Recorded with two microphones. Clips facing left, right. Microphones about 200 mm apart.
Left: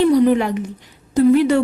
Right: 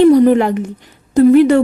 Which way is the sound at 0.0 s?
50° right (ahead or behind).